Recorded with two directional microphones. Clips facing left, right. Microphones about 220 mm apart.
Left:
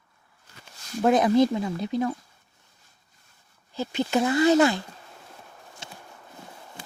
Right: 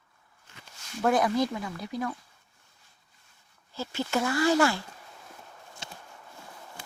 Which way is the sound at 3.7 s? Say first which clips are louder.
Left 5 dB; 20° left (ahead or behind).